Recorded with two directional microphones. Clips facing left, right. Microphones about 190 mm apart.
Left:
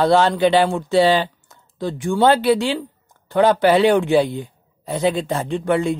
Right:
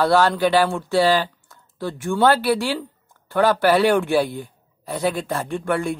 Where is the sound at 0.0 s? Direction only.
20° left (ahead or behind).